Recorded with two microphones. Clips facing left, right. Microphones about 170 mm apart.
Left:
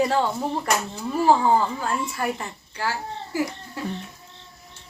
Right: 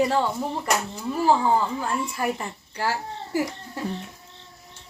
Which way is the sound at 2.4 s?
35° right (ahead or behind).